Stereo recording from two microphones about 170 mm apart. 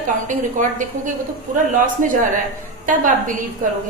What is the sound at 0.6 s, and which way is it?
A woman's voice, 50° right (ahead or behind).